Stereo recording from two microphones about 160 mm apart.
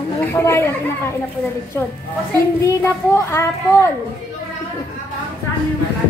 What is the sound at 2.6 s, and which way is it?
Speech, 15° left (ahead or behind).